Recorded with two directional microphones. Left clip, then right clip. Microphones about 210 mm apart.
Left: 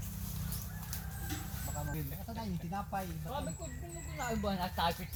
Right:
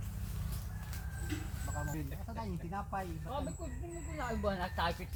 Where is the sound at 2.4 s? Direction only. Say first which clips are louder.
Left 1 dB; 40° left (ahead or behind).